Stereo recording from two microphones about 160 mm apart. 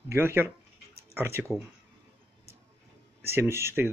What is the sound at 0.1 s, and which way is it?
Speech, 15° right (ahead or behind).